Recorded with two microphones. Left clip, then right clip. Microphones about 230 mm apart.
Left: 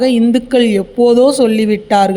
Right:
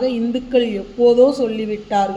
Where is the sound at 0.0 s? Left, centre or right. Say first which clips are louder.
Left 8 dB; left.